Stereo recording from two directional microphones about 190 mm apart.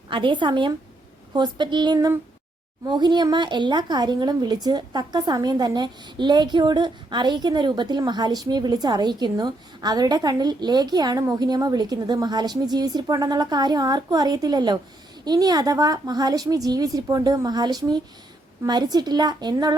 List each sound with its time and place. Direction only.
0.1 s speech: 25° right (ahead or behind)